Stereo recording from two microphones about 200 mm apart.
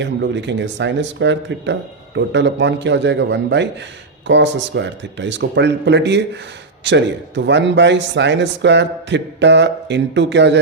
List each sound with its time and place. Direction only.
0.0 s speech: 60° right (ahead or behind)